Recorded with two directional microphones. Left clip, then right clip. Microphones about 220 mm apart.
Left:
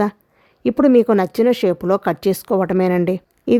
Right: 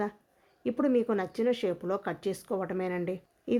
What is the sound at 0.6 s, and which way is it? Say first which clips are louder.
Speech: left 14 dB; 50° left (ahead or behind).